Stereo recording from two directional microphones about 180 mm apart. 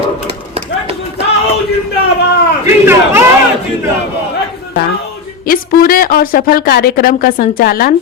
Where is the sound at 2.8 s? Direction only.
15° right (ahead or behind).